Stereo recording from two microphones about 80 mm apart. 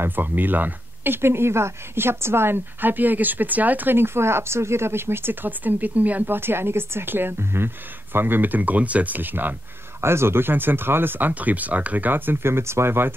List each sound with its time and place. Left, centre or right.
0.0 s speech: right